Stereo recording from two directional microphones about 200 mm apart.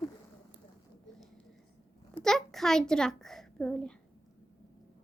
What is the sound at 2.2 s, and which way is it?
A child's voice, centre (ahead or behind).